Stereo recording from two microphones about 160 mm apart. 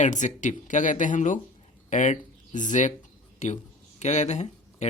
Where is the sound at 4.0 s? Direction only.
45° left (ahead or behind).